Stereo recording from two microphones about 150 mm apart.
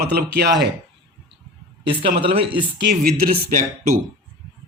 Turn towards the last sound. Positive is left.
turn(degrees=-65)  # may be behind; listen again after turning